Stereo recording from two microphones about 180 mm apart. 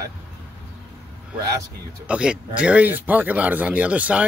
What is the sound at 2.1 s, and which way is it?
Speech, 5° right (ahead or behind).